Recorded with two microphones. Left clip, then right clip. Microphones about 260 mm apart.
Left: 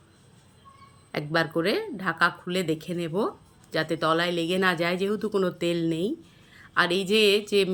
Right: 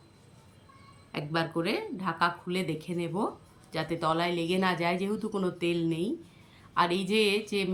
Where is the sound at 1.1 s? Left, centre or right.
Centre.